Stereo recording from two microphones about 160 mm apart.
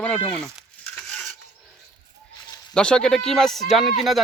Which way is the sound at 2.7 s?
5° left (ahead or behind).